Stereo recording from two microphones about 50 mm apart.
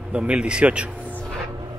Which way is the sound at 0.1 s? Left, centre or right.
Right.